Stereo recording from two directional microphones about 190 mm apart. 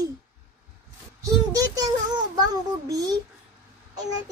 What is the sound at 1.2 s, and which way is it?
Child singing, 20° right (ahead or behind).